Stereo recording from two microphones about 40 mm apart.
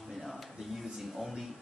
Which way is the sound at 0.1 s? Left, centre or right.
Centre.